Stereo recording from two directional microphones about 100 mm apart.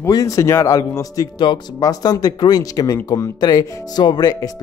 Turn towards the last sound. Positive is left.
turn(degrees=40)  # may be behind; listen again after turning